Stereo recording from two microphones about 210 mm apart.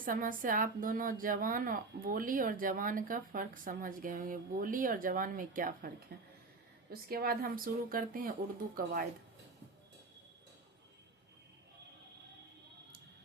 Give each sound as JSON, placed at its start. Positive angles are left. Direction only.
{"t": 0.0, "sound": "a woman's voice", "side_deg": -40}